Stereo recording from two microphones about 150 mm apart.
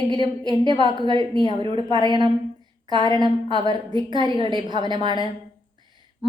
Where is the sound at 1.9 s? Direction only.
30° right (ahead or behind).